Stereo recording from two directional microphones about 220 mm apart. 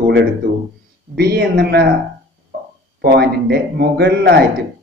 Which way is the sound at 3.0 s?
45° right (ahead or behind).